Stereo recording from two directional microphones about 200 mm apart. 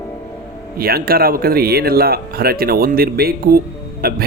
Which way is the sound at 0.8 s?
50° right (ahead or behind).